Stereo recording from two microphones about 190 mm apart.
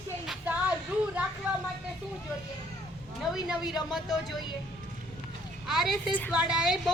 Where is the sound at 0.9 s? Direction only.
5° right (ahead or behind).